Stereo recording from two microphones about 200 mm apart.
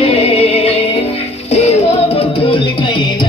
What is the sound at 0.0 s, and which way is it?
Music, 30° left (ahead or behind).